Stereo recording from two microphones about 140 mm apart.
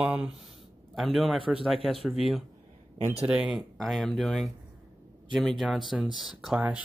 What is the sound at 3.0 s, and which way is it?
Speech, 15° right (ahead or behind).